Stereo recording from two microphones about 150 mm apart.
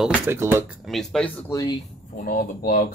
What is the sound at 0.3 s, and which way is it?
Speech, 15° right (ahead or behind).